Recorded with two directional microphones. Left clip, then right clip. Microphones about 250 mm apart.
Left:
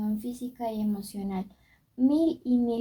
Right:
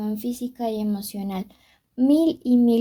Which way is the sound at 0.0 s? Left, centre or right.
Right.